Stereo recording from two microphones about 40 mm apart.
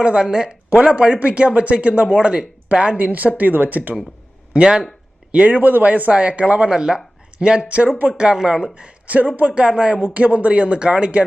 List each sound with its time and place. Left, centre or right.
0.0 s speech: right
4.5 s speech: right
5.3 s speech: right
6.7 s speech: centre
8.1 s speech: centre
8.7 s speech: right
9.5 s speech: right
10.0 s speech: right